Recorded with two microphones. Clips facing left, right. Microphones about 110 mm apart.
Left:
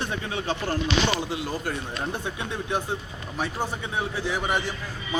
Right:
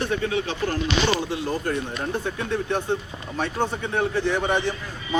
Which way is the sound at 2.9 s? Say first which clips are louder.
Right 5 dB; 10° left (ahead or behind).